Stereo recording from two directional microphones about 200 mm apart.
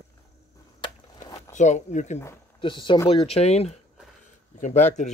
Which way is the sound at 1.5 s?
35° left (ahead or behind).